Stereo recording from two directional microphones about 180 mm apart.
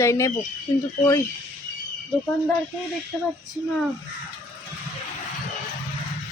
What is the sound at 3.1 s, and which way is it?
Female singing, 5° left (ahead or behind).